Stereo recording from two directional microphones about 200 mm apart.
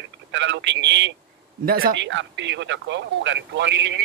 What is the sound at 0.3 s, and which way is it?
Speech, 65° right (ahead or behind).